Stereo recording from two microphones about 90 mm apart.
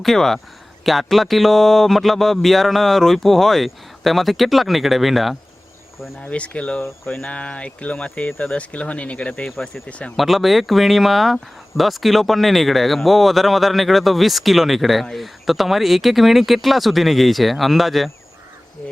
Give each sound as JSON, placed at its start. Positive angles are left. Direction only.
{"t": 0.0, "sound": "speech", "side_deg": 5}
{"t": 6.2, "sound": "speech", "side_deg": 15}
{"t": 6.8, "sound": "a sound", "side_deg": 30}
{"t": 7.2, "sound": "speech", "side_deg": 15}
{"t": 9.5, "sound": "speech", "side_deg": 0}